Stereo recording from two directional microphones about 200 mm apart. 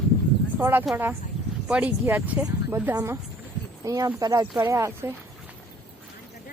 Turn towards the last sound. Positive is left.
turn(degrees=-15)  # may be behind; listen again after turning